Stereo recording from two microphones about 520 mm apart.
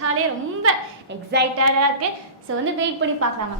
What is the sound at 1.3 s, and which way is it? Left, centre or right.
Speech, centre.